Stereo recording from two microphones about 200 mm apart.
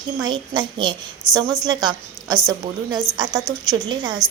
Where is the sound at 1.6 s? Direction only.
20° right (ahead or behind).